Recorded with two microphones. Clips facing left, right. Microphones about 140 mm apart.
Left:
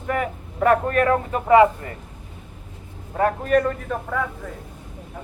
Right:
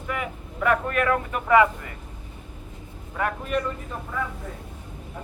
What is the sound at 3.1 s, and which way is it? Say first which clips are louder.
Speech: left 7 dB; 40° left (ahead or behind).